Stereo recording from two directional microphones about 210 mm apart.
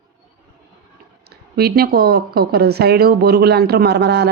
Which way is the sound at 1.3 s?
45° right (ahead or behind).